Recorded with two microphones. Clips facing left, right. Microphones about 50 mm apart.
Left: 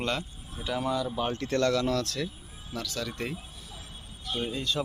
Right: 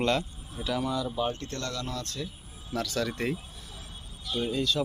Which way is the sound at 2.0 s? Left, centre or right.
Left.